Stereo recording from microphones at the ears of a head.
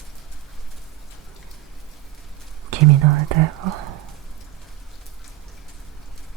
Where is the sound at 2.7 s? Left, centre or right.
Right.